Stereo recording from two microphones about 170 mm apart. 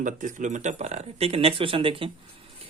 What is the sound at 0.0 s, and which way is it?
Speech, 50° right (ahead or behind).